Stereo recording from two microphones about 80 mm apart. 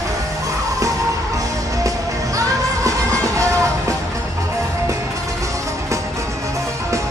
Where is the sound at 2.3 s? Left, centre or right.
Right.